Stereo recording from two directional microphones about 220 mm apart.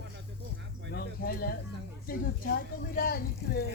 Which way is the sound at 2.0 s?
40° left (ahead or behind).